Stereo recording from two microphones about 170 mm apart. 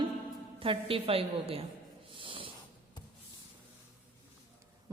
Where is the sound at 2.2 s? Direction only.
30° right (ahead or behind).